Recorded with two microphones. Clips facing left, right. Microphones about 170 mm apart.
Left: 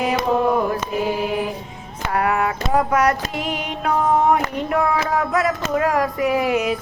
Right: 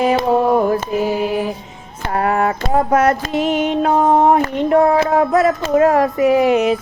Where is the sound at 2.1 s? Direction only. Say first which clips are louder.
Right 3 dB; 35° right (ahead or behind).